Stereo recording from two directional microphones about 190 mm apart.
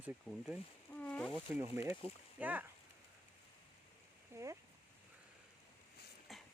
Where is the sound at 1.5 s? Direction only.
15° right (ahead or behind).